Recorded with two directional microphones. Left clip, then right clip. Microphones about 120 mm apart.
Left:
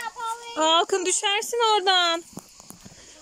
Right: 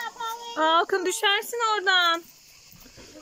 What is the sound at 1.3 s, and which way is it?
Speech, 25° left (ahead or behind).